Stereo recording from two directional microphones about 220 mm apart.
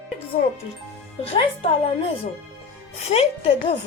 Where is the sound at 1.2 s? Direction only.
30° left (ahead or behind).